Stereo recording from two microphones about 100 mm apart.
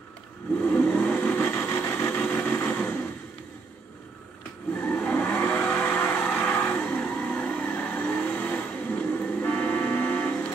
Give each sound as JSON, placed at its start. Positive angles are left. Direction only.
{"t": 0.6, "sound": "vehicle", "side_deg": 10}
{"t": 1.4, "sound": "vehicle", "side_deg": 30}
{"t": 4.8, "sound": "vehicle", "side_deg": 10}